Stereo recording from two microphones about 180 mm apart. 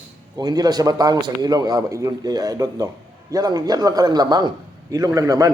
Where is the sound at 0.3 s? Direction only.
20° right (ahead or behind).